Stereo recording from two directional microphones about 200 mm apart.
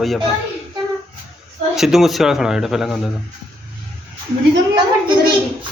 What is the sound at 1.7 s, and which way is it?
Speech, centre (ahead or behind).